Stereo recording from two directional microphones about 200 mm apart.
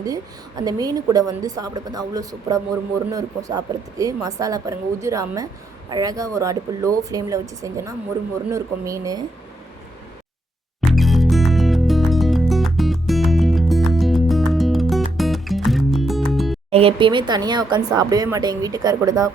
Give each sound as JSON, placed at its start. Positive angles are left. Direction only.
{"t": 0.0, "sound": "a woman's voice", "side_deg": -20}
{"t": 10.8, "sound": "music", "side_deg": 0}
{"t": 16.7, "sound": "speech", "side_deg": -25}